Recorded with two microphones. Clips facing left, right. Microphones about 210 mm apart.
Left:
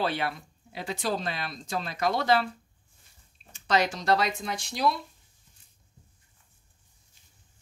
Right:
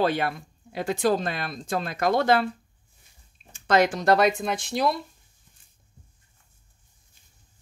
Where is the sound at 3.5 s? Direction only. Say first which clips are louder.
Right 5 dB; 50° right (ahead or behind).